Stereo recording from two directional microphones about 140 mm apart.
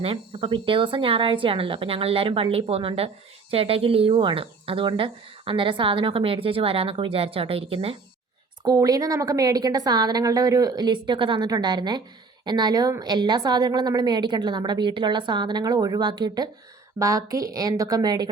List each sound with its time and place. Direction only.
0.0 s speech: 40° right (ahead or behind)
8.6 s speech: 25° right (ahead or behind)